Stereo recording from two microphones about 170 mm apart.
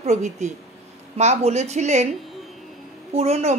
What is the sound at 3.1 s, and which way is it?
Speech, 40° right (ahead or behind).